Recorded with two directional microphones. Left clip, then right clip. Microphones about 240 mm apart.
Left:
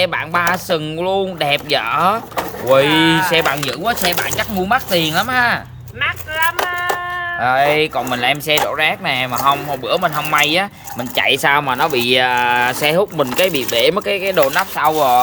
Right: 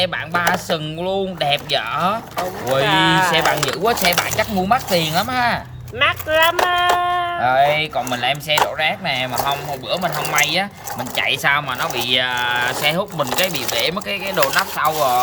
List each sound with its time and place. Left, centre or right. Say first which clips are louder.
0.0 s speech: left 3 dB; centre
3.8 s speech: right 1 dB; centre
6.0 s speech: right 3 dB; right
6.7 s a sound: right 4 dB; right
7.4 s speech: left 3 dB; centre